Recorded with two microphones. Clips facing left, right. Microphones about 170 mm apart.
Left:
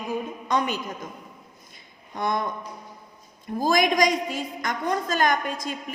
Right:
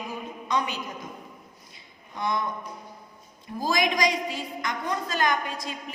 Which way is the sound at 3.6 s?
50° left (ahead or behind).